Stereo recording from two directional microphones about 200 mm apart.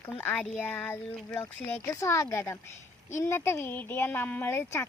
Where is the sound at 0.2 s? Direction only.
5° left (ahead or behind).